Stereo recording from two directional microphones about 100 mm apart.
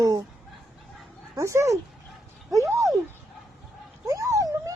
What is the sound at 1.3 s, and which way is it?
Speech, 30° right (ahead or behind).